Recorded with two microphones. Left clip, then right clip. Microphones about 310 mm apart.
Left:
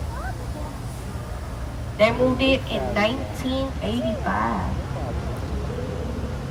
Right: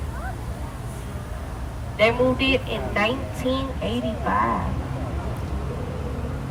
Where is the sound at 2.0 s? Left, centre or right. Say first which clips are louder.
Even; right.